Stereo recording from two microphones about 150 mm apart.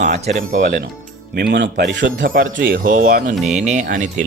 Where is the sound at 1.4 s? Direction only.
90° right.